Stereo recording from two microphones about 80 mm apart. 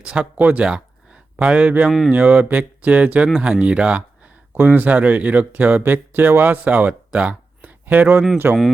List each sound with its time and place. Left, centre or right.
0.0 s speech: centre
1.9 s speech: centre
2.1 s speech: centre
4.5 s speech: right
8.0 s speech: centre